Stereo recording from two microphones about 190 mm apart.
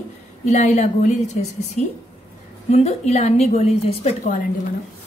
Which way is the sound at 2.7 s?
35° left (ahead or behind).